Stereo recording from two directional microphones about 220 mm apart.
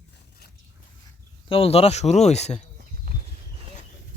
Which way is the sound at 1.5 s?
25° left (ahead or behind).